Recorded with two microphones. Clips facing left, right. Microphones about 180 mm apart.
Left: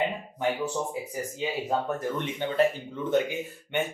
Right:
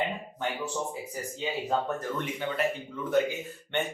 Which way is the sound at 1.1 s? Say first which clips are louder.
Left 2 dB; 10° left (ahead or behind).